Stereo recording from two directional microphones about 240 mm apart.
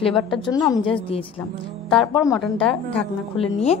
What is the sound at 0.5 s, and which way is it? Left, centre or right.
Speech, centre.